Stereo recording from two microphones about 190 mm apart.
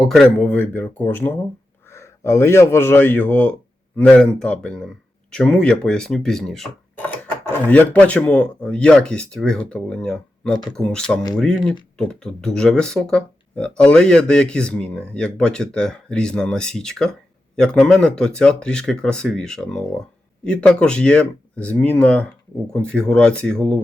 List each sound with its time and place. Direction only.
0.0 s a man's voice: centre (ahead or behind)